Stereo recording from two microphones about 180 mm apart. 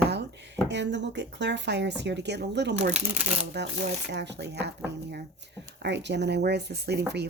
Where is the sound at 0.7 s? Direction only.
80° right.